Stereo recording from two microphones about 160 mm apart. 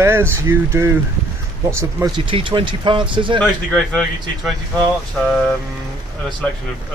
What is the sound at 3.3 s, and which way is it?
Speech, 5° left (ahead or behind).